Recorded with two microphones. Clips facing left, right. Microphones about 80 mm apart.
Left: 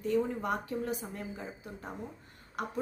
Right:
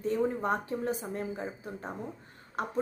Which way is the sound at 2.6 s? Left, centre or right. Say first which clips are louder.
Right 3 dB; right.